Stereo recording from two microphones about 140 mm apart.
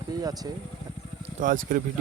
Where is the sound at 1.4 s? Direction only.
75° right (ahead or behind).